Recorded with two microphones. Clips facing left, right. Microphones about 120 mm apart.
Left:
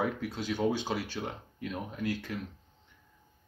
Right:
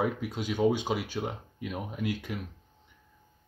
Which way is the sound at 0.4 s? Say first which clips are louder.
Right 4 dB; 15° right (ahead or behind).